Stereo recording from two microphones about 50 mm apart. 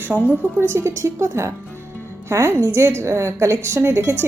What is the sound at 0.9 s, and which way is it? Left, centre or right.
A woman's voice, right.